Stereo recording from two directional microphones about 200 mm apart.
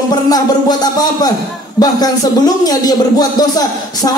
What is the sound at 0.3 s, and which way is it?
Speech, 20° left (ahead or behind).